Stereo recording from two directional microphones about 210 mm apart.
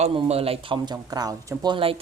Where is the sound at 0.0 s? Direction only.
30° right (ahead or behind).